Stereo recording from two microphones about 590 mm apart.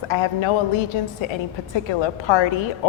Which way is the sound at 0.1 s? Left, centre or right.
Left.